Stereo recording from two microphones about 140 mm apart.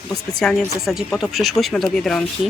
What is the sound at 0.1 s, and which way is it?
A woman's voice, 5° left (ahead or behind).